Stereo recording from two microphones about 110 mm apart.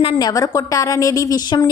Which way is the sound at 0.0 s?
40° left (ahead or behind).